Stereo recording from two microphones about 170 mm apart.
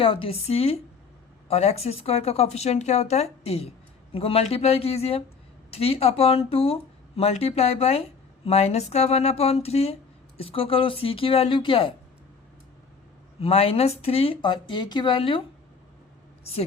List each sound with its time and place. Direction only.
0.0 s speech: 30° left (ahead or behind)
13.4 s speech: 35° left (ahead or behind)